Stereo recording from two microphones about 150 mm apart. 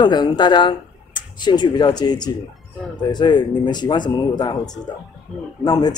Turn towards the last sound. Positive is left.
turn(degrees=25)  # may be behind; listen again after turning